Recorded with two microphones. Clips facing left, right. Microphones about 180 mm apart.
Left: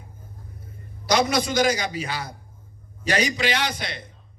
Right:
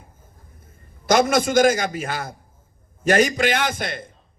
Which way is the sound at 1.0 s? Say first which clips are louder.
Right 4 dB; 50° right (ahead or behind).